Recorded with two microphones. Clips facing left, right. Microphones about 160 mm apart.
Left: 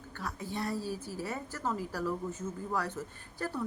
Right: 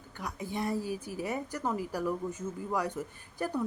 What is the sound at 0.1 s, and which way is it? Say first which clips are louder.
Speech: right 1 dB; 15° right (ahead or behind).